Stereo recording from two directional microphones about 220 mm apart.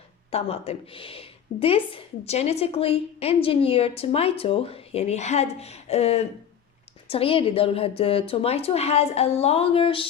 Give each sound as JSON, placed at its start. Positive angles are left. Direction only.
{"t": 0.3, "sound": "a woman's voice", "side_deg": 25}